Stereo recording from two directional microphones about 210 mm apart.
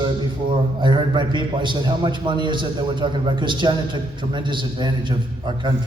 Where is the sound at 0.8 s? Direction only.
20° right (ahead or behind).